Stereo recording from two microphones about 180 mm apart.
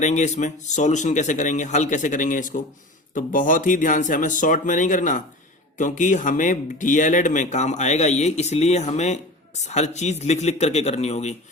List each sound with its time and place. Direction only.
0.0 s speech: 40° left (ahead or behind)